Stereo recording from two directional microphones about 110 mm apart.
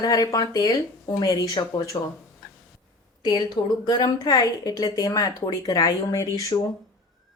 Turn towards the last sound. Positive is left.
turn(degrees=30)  # may be behind; listen again after turning